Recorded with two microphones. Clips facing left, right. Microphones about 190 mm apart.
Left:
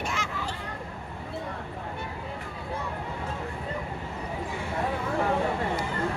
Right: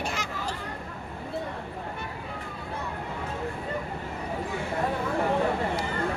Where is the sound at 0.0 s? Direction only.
40° right (ahead or behind).